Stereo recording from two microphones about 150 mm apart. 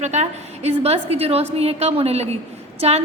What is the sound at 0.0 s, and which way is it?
A woman's voice, 50° right (ahead or behind).